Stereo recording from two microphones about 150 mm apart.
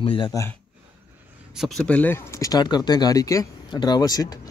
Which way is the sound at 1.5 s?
Centre (ahead or behind).